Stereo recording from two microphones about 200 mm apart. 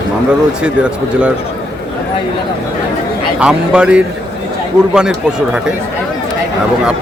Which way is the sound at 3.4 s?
5° right (ahead or behind).